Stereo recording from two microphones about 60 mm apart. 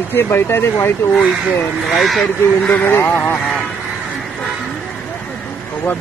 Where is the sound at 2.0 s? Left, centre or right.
Centre.